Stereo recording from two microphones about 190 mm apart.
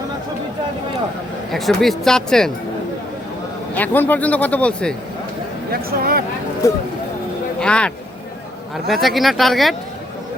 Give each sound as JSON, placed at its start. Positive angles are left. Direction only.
{"t": 1.5, "sound": "speech", "side_deg": 0}
{"t": 3.8, "sound": "speech", "side_deg": 10}
{"t": 5.7, "sound": "speech", "side_deg": -50}
{"t": 6.6, "sound": "speech", "side_deg": 15}
{"t": 7.6, "sound": "speech", "side_deg": 5}